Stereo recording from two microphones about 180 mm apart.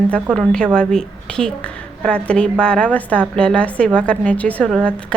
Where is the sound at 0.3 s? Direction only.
5° left (ahead or behind).